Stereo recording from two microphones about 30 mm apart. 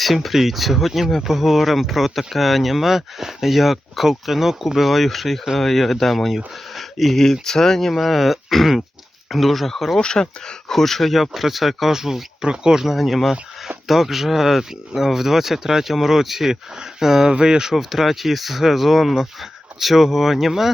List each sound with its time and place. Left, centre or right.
0.0 s speech: centre
10.0 s speech: left
10.7 s speech: centre
12.4 s speech: right
13.0 s speech: centre; by 17.7 s right
17.7 s speech: centre